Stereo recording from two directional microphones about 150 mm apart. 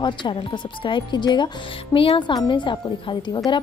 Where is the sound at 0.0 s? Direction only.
30° left (ahead or behind).